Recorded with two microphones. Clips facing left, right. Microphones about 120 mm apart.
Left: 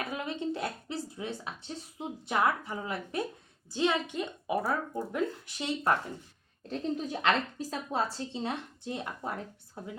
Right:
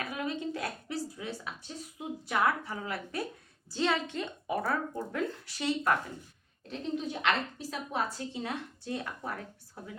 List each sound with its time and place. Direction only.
0.1 s a woman's voice: 25° left (ahead or behind)
6.7 s a woman's voice: 40° left (ahead or behind); by 9.9 s 25° left (ahead or behind)